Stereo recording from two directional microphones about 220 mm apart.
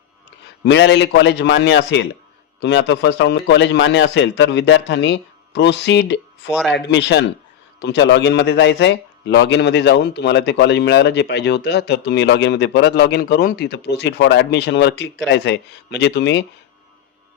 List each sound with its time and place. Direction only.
0.3 s a man's voice: 50° left (ahead or behind)